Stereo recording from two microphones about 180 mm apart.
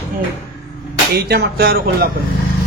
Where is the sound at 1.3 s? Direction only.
60° right (ahead or behind).